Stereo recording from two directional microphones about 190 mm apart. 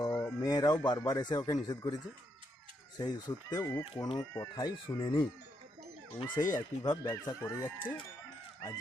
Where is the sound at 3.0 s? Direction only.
20° left (ahead or behind).